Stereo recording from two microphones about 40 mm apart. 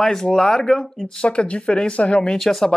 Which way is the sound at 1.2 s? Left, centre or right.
Left.